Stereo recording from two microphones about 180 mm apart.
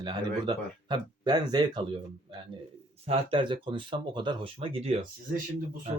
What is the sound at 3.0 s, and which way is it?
Speech, 30° right (ahead or behind).